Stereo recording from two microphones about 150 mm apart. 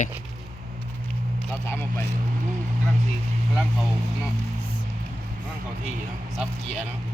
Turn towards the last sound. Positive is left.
turn(degrees=-5)  # may be behind; listen again after turning